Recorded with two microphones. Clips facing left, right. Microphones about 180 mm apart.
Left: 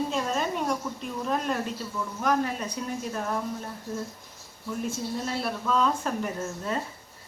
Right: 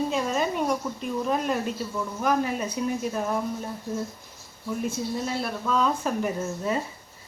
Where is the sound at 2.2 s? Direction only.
5° right (ahead or behind).